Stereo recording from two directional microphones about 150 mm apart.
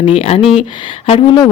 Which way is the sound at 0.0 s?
40° left (ahead or behind).